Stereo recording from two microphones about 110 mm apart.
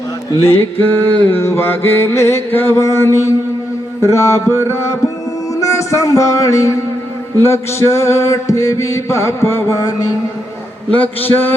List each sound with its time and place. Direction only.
0.4 s mantra: 20° left (ahead or behind)
5.5 s music: 25° left (ahead or behind)
7.3 s mantra: 25° left (ahead or behind)
10.9 s a man's voice: 15° left (ahead or behind)